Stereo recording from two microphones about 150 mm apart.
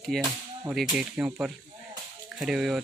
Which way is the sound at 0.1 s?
Centre (ahead or behind).